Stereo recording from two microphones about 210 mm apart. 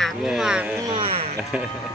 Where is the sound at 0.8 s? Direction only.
25° right (ahead or behind).